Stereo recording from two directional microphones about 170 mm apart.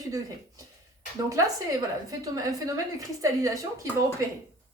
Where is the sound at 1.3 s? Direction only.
20° right (ahead or behind).